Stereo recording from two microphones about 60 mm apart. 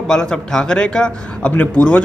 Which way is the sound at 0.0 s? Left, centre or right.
Centre.